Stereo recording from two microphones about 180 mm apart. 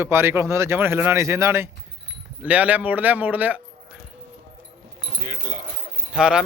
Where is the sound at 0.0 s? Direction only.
15° right (ahead or behind).